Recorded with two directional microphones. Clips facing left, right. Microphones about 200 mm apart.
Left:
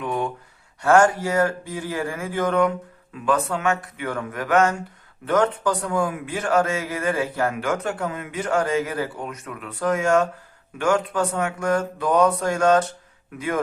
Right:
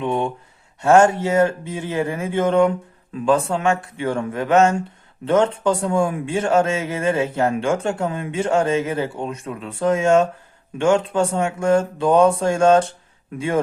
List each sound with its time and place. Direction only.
0.0 s a man's voice: 25° right (ahead or behind)